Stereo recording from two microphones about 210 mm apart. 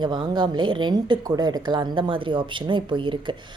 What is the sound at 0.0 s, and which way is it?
A woman's voice, 20° right (ahead or behind).